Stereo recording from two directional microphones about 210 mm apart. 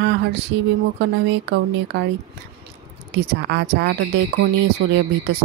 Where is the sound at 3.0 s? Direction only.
55° right (ahead or behind).